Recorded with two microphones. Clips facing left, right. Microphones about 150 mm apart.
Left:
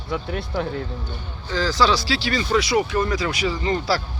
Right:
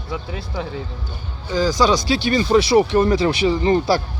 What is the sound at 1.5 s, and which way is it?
Speech, 15° right (ahead or behind).